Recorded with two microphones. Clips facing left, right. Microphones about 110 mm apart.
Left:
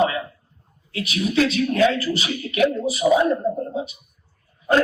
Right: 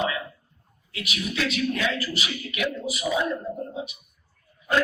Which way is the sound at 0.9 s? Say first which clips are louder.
Left 9 dB; 30° left (ahead or behind).